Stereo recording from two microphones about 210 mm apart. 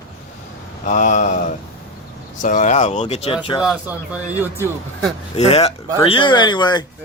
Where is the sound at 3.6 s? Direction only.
5° right (ahead or behind).